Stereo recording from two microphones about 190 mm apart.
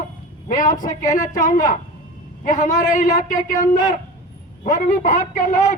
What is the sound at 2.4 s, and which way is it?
A man's voice, 40° left (ahead or behind).